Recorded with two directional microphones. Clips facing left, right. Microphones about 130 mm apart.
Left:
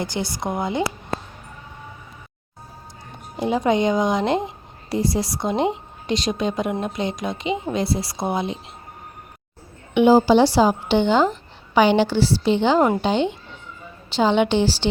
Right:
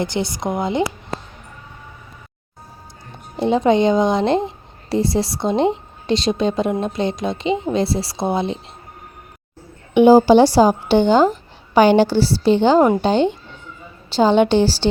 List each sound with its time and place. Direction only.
0.0 s a woman's voice: 20° right (ahead or behind)
3.3 s a woman's voice: 25° right (ahead or behind)
9.9 s a woman's voice: 40° right (ahead or behind)